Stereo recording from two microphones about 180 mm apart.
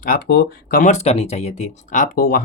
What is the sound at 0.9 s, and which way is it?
Speech, 35° left (ahead or behind).